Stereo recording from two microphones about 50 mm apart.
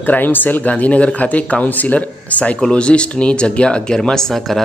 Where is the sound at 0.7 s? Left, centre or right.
Left.